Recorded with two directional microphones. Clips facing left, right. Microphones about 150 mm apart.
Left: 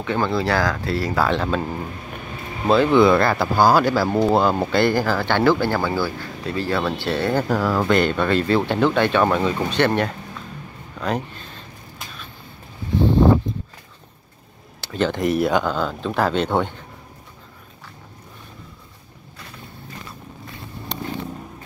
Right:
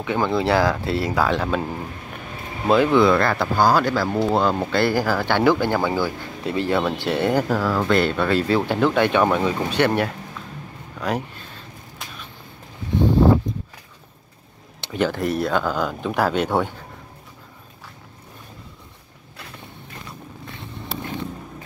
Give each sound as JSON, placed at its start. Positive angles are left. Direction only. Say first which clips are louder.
{"t": 0.0, "sound": "speech", "louder": "even", "side_deg": -15}
{"t": 1.1, "sound": "speech", "louder": "left 1 dB", "side_deg": -10}
{"t": 2.7, "sound": "speech", "louder": "even", "side_deg": -10}
{"t": 3.0, "sound": "speech", "louder": "left 2 dB", "side_deg": 5}
{"t": 4.7, "sound": "speech", "louder": "left 1 dB", "side_deg": -5}
{"t": 7.4, "sound": "speech", "louder": "left 1 dB", "side_deg": 0}
{"t": 14.8, "sound": "a sound", "louder": "even", "side_deg": -15}
{"t": 15.0, "sound": "speech", "louder": "left 4 dB", "side_deg": 0}
{"t": 20.9, "sound": "vehicle", "louder": "left 1 dB", "side_deg": -5}